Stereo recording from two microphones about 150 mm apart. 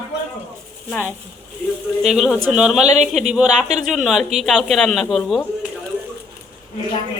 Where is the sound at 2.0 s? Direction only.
5° right (ahead or behind).